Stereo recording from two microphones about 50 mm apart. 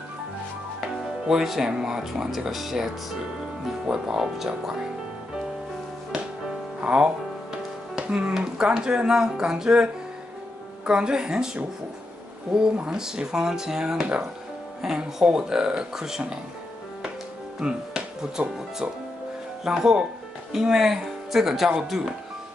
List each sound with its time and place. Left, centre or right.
0.7 s speech: centre
6.8 s music: right
8.4 s speech: centre
10.9 s speech: centre
17.6 s music: centre
19.6 s speech: centre